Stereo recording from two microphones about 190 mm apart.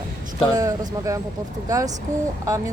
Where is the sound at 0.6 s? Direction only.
15° right (ahead or behind).